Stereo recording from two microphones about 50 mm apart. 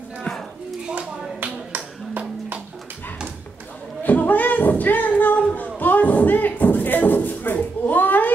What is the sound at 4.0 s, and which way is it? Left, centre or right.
Music, left.